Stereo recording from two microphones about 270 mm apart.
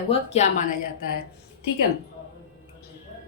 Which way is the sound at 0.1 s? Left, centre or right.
Left.